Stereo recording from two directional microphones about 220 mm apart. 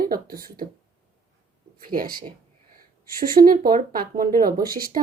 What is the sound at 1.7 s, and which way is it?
Speech, 40° right (ahead or behind).